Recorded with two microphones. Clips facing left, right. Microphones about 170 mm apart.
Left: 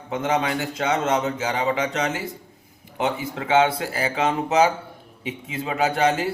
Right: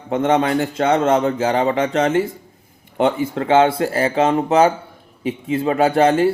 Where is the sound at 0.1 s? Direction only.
35° right (ahead or behind).